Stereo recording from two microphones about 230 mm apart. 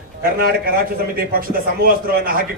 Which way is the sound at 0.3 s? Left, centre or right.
Right.